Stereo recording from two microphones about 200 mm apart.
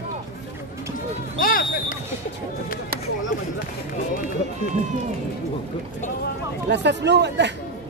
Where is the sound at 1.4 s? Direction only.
45° left (ahead or behind).